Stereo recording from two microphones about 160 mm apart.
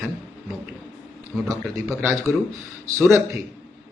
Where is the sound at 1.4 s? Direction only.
20° right (ahead or behind).